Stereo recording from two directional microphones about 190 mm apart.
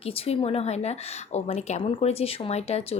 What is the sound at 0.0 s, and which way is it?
A woman's voice, 30° left (ahead or behind).